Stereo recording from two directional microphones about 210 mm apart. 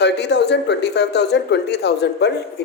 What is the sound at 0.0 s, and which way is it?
Speech, 55° left (ahead or behind).